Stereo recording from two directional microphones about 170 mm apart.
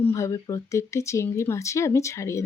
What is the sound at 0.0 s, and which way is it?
Speech, 15° left (ahead or behind).